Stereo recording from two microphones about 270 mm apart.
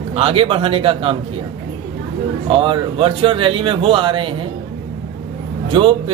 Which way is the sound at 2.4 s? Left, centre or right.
Centre.